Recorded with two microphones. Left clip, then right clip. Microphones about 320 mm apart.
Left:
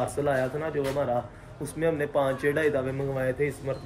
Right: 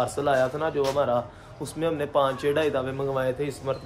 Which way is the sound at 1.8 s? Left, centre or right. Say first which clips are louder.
Right 2 dB; centre.